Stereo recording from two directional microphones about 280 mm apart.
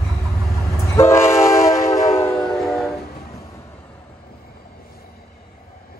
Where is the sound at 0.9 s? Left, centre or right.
Centre.